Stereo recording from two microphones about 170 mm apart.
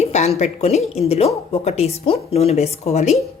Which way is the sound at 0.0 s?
40° left (ahead or behind).